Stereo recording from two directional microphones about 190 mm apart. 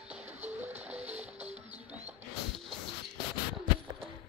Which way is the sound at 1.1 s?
35° right (ahead or behind).